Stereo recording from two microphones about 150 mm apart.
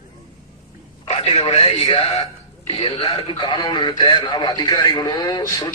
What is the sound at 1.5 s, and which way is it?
Speech, 40° left (ahead or behind).